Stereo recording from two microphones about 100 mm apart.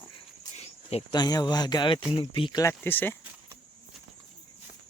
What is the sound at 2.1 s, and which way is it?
Speech, 65° left (ahead or behind).